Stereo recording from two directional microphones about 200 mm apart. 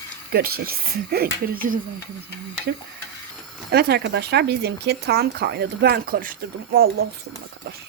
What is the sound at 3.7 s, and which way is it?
Speech, 55° right (ahead or behind).